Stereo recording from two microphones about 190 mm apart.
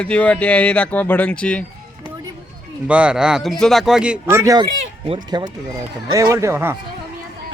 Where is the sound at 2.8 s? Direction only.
5° right (ahead or behind).